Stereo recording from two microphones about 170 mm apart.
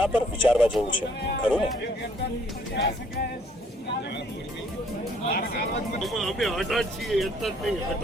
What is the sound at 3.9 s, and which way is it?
Vehicle, 85° left.